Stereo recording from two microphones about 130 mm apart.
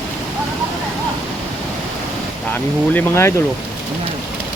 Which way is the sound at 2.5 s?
15° left (ahead or behind).